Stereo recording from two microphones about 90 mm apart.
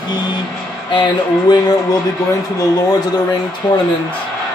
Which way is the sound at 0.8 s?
60° left (ahead or behind).